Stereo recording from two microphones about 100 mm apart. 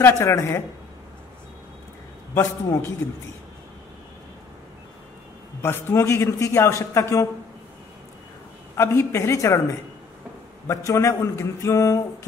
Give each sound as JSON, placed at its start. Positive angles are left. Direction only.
{"t": 0.0, "sound": "a man's voice", "side_deg": 25}
{"t": 2.3, "sound": "a man's voice", "side_deg": 30}
{"t": 5.6, "sound": "a man's voice", "side_deg": 25}
{"t": 8.7, "sound": "a man's voice", "side_deg": 30}